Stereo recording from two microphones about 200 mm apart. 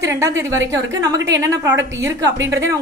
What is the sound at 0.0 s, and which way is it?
A woman's voice, 15° right (ahead or behind).